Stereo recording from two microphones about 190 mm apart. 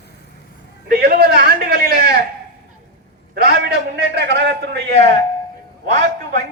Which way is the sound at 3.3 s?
55° right (ahead or behind).